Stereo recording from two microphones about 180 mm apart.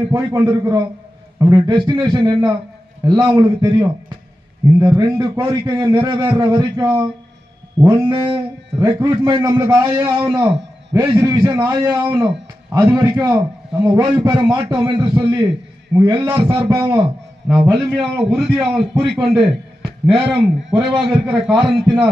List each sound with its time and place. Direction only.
0.1 s a man's voice: 20° right (ahead or behind)
17.5 s a man's voice: 10° right (ahead or behind)